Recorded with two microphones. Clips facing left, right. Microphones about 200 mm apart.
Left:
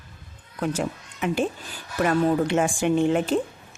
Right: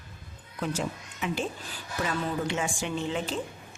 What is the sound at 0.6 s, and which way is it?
Speech, 55° left (ahead or behind).